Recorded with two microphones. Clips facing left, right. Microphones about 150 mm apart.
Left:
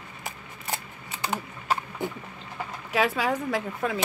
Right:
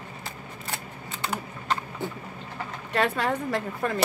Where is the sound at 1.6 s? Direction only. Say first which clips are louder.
Left 1 dB; 5° left (ahead or behind).